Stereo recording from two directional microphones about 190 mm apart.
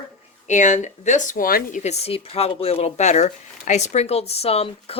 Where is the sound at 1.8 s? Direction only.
35° left (ahead or behind).